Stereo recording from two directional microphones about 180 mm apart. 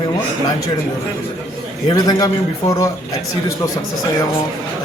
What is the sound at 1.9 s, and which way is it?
A man's voice, 20° left (ahead or behind).